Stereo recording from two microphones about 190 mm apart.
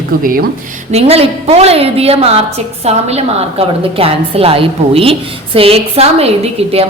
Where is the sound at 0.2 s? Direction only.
45° right (ahead or behind).